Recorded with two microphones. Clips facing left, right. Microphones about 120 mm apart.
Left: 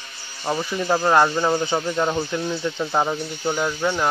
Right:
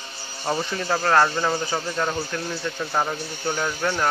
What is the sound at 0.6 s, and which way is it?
Speech, 15° left (ahead or behind).